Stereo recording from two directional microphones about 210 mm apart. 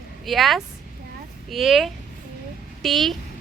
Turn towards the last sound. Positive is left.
turn(degrees=0)  # may be behind; listen again after turning